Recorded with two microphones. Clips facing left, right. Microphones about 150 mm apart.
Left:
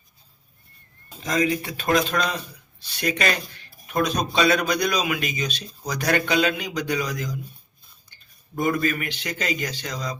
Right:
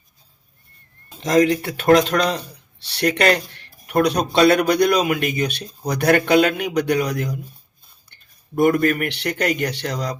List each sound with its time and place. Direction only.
1.2 s a man's voice: 80° right